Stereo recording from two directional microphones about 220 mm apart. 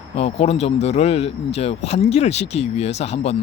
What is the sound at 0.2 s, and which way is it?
Speech, 30° left (ahead or behind).